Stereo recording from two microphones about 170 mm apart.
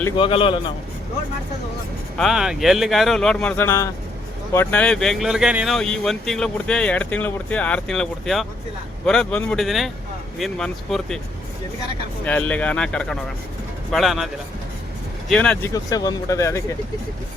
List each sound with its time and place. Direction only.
0.2 s a man's voice: 30° left (ahead or behind)
2.1 s speech: centre (ahead or behind)
12.2 s speech: 10° left (ahead or behind)
15.3 s speech: 5° left (ahead or behind)
15.7 s speech: 20° left (ahead or behind)